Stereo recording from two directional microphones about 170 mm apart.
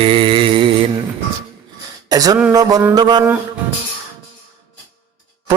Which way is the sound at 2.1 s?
20° right (ahead or behind).